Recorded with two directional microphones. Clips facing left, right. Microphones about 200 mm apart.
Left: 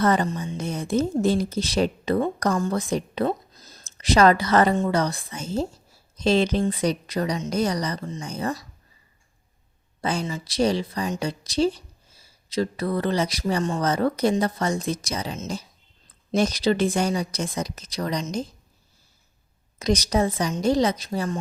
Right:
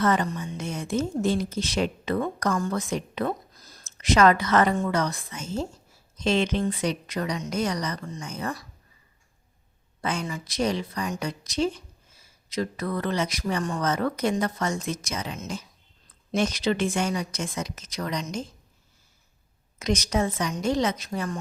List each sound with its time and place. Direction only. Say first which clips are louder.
0.0 s a woman's voice: left 2 dB; 35° left (ahead or behind)
10.0 s a woman's voice: left 3 dB; 30° left (ahead or behind)
19.8 s a woman's voice: left 3 dB; 35° left (ahead or behind)